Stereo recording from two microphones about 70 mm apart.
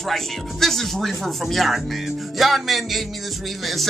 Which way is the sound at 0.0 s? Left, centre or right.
Centre.